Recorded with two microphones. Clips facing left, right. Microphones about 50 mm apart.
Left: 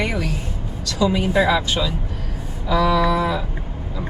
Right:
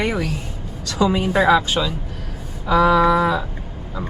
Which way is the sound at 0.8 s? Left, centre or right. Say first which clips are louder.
Right 1 dB; right.